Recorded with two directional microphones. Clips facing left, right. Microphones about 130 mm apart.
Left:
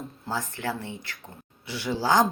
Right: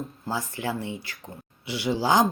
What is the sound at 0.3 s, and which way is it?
Speech, 10° right (ahead or behind).